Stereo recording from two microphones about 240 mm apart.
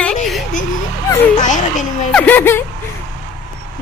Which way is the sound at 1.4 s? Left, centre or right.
Left.